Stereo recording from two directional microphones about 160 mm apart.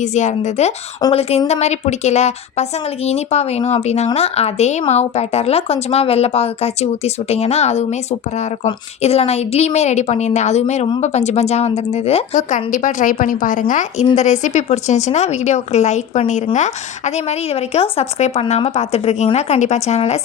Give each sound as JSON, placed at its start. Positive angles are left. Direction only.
{"t": 0.0, "sound": "a woman's voice", "side_deg": 50}
{"t": 1.0, "sound": "speech", "side_deg": 25}
{"t": 1.5, "sound": "a woman's voice", "side_deg": 45}